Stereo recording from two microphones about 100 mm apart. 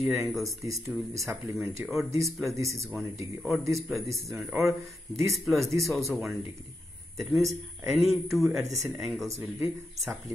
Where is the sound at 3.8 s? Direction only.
Centre (ahead or behind).